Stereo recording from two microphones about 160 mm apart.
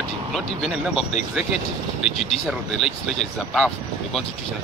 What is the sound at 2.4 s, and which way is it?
Speech, centre (ahead or behind).